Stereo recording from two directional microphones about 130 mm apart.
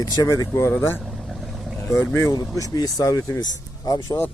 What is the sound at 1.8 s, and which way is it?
Speech, 20° left (ahead or behind).